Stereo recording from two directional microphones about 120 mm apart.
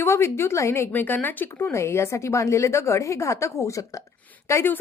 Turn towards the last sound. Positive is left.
turn(degrees=20)  # may be behind; listen again after turning